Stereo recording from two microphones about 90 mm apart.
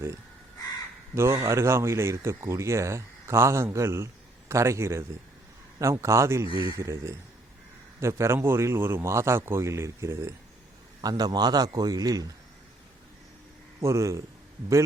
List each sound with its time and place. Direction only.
1.1 s speech: 30° right (ahead or behind)
11.0 s a man's voice: 50° right (ahead or behind)
13.8 s speech: 35° right (ahead or behind)